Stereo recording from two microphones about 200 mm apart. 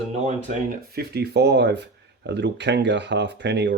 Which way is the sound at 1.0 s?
55° right (ahead or behind).